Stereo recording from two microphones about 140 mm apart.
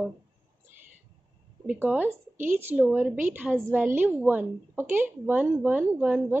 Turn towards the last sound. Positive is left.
turn(degrees=-15)  # may be behind; listen again after turning